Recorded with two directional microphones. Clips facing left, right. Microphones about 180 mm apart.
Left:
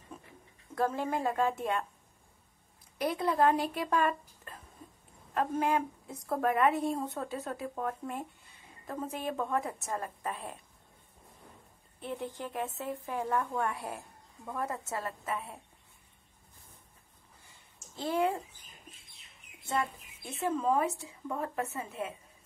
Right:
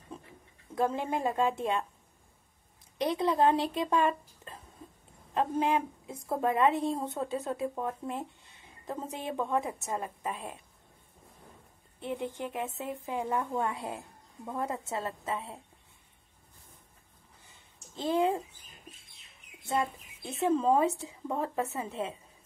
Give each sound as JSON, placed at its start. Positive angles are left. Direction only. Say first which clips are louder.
{"t": 0.7, "sound": "a woman's voice", "louder": "right 1 dB", "side_deg": -15}
{"t": 3.0, "sound": "a woman's voice", "louder": "right 2 dB", "side_deg": -20}
{"t": 12.0, "sound": "a woman's voice", "louder": "right 3 dB", "side_deg": -15}
{"t": 17.5, "sound": "a sound", "louder": "right 1 dB", "side_deg": -20}
{"t": 19.7, "sound": "a woman's voice", "louder": "right 2 dB", "side_deg": -20}